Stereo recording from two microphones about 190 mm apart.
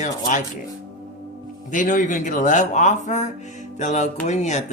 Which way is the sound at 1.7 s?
40° left (ahead or behind).